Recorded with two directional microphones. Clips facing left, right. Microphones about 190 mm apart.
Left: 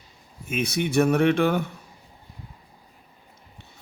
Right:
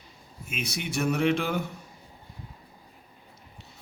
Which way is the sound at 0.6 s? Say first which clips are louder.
Left 8 dB; 55° left (ahead or behind).